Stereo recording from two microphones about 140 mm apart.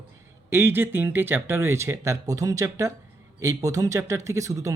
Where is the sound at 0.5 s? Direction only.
15° right (ahead or behind).